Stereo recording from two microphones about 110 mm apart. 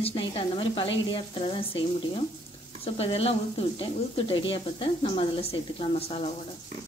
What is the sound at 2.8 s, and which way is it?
Speech, 60° left (ahead or behind).